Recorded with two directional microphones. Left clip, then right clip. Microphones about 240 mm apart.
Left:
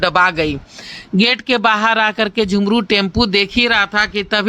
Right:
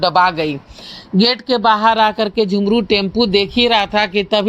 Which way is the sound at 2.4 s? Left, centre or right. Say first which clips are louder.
Right 1 dB; centre.